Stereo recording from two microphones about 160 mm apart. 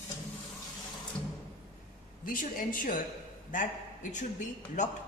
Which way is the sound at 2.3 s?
60° left (ahead or behind).